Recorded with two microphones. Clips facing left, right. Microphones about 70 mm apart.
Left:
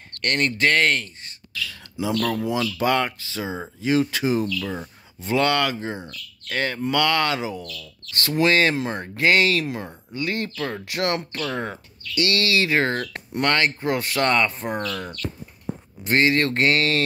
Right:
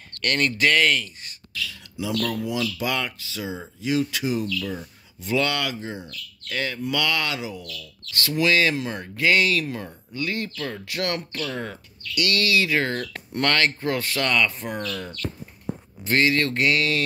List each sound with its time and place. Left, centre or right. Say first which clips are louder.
0.2 s speech: left 1 dB; left
13.3 s speech: left 1 dB; centre
14.2 s speech: left 3 dB; left